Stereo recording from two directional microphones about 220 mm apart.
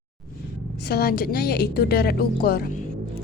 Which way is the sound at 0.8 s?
45° left (ahead or behind).